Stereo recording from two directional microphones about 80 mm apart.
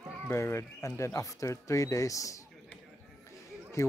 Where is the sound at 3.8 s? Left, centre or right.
Left.